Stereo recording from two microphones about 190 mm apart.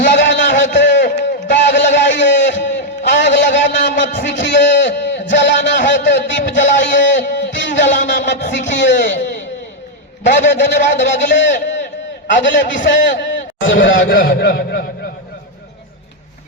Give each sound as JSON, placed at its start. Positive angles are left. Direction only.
{"t": 0.0, "sound": "a sound", "side_deg": 70}
{"t": 4.3, "sound": "a man's voice", "side_deg": 70}
{"t": 10.2, "sound": "a man's voice", "side_deg": 70}
{"t": 14.1, "sound": "a man's voice", "side_deg": 50}